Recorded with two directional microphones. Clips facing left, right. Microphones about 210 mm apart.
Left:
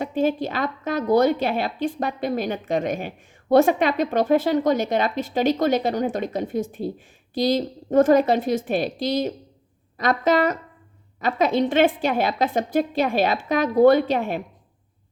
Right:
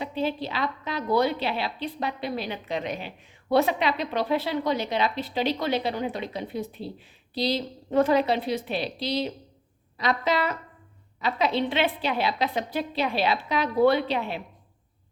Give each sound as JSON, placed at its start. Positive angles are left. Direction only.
{"t": 0.0, "sound": "a woman's voice", "side_deg": 50}